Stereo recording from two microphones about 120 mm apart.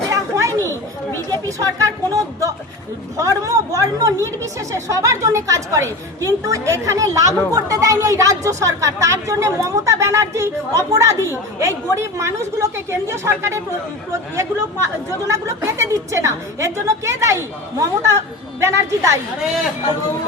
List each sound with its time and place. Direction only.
0.1 s chatter: 25° right (ahead or behind)
1.3 s speech: 25° right (ahead or behind)